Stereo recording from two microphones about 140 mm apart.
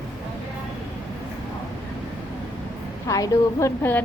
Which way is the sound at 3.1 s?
20° left (ahead or behind).